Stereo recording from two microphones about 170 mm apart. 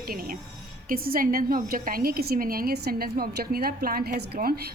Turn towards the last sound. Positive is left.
turn(degrees=-60)  # may be behind; listen again after turning